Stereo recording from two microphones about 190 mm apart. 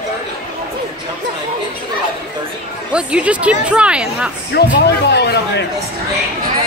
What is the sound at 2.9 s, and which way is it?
Speech, 5° right (ahead or behind).